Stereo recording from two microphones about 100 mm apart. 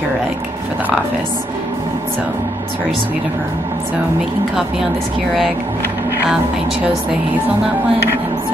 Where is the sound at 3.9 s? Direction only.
5° right (ahead or behind).